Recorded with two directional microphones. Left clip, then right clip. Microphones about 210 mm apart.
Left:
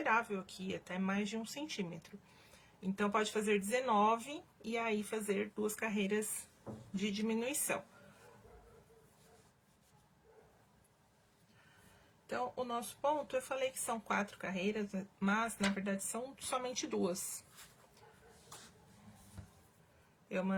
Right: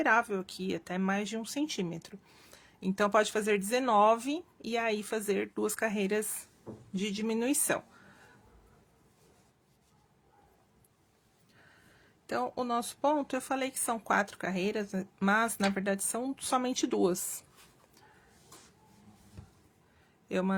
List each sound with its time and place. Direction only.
0.0 s speech: 45° right (ahead or behind)
3.0 s speech: 45° right (ahead or behind)
12.3 s speech: 45° right (ahead or behind)
20.2 s a man's voice: 45° right (ahead or behind)